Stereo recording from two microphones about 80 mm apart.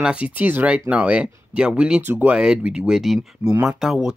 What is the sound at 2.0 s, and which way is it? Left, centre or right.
Speech, right.